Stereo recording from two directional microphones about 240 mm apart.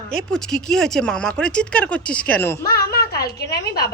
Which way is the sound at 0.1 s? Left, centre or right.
Centre.